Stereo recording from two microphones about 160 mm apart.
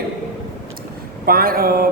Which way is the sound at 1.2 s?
65° right (ahead or behind).